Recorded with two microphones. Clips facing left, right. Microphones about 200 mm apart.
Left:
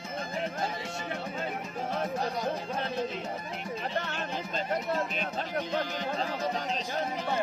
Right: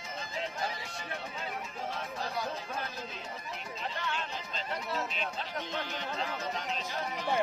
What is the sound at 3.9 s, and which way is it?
Speech, 50° left (ahead or behind).